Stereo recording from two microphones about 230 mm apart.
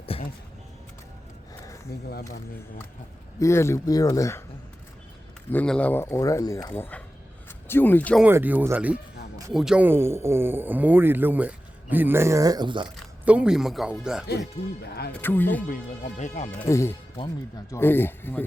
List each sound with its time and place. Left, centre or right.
0.0 s music: left
1.9 s speech: left
3.3 s speech: centre
5.5 s speech: centre
8.2 s speech: centre
13.0 s speech: centre
15.2 s speech: centre
15.7 s speech: left
16.6 s speech: centre